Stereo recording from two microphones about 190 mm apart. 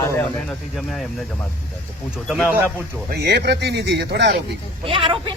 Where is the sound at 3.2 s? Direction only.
60° right (ahead or behind).